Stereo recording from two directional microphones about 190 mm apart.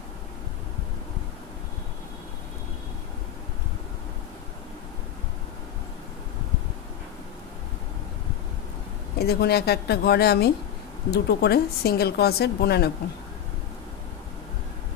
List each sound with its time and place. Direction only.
9.2 s speech: 55° left (ahead or behind)